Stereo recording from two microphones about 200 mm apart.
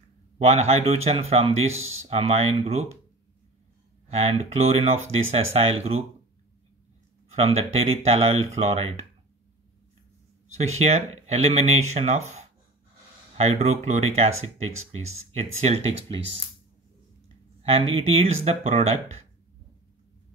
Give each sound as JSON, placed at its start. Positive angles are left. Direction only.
{"t": 0.4, "sound": "speech", "side_deg": -30}
{"t": 4.1, "sound": "speech", "side_deg": -30}
{"t": 7.2, "sound": "speech", "side_deg": -30}
{"t": 11.2, "sound": "speech", "side_deg": -30}
{"t": 17.6, "sound": "a sound", "side_deg": -30}
{"t": 17.9, "sound": "speech", "side_deg": -30}